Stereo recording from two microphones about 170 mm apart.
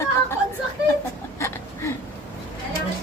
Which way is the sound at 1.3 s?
15° left (ahead or behind).